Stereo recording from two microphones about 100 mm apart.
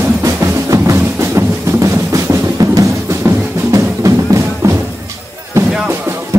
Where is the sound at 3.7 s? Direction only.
35° right (ahead or behind).